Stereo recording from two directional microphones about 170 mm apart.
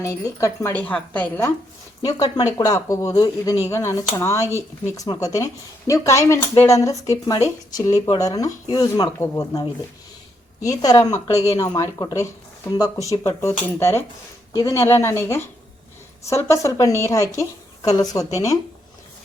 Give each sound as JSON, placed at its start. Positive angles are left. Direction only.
{"t": 0.0, "sound": "a woman's voice", "side_deg": 20}
{"t": 2.0, "sound": "a woman's voice", "side_deg": 20}